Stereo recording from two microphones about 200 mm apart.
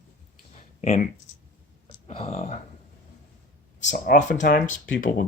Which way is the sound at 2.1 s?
30° left (ahead or behind).